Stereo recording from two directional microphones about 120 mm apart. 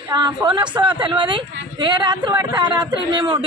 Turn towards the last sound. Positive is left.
turn(degrees=-40)  # may be behind; listen again after turning